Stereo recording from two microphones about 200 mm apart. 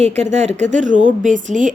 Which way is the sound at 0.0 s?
35° right (ahead or behind).